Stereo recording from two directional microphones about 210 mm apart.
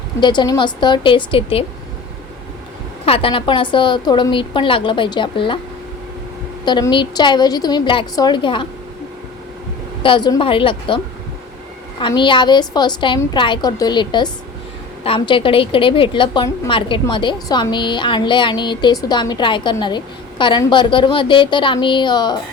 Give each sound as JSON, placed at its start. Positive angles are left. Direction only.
{"t": 0.2, "sound": "a woman's voice", "side_deg": 20}
{"t": 3.1, "sound": "a woman's voice", "side_deg": 25}
{"t": 6.7, "sound": "a woman's voice", "side_deg": 20}
{"t": 10.0, "sound": "a woman's voice", "side_deg": 20}